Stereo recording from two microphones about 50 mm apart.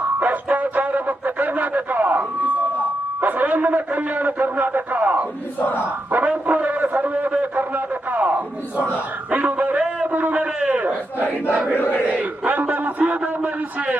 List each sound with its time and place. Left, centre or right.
0.5 s music: right
3.2 s a man's voice: right
5.5 s battle cry: left
5.8 s a man's voice: right
8.1 s a sound: right
9.3 s a man's voice: right
11.8 s battle cry: left
12.0 s a man's voice: right